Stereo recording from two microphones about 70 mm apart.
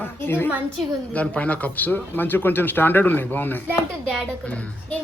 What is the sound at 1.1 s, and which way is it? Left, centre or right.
Speech, centre.